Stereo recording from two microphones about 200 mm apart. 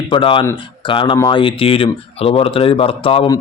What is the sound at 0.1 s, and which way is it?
Speech, 25° left (ahead or behind).